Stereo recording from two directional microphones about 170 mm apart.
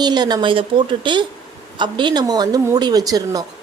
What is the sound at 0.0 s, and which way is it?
A woman's voice, 25° right (ahead or behind).